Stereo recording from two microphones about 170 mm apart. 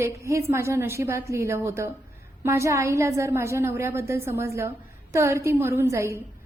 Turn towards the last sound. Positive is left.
turn(degrees=-15)  # may be behind; listen again after turning